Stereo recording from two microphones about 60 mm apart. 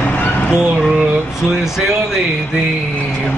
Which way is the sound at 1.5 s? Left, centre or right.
Centre.